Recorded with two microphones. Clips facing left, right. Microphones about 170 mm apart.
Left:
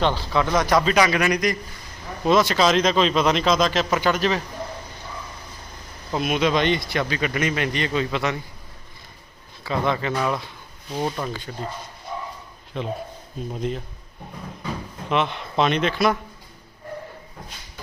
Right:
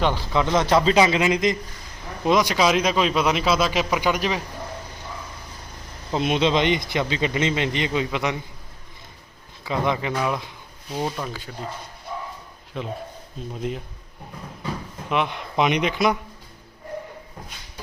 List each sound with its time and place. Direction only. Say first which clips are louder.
0.0 s a man's voice: even; 15° right (ahead or behind)
6.1 s a man's voice: right 1 dB; 25° right (ahead or behind)
9.6 s speech: even; 15° right (ahead or behind)
10.9 s speech: left 1 dB; centre (ahead or behind)
12.7 s speech: left 2 dB; 5° right (ahead or behind)
15.1 s speech: left 1 dB; 10° right (ahead or behind)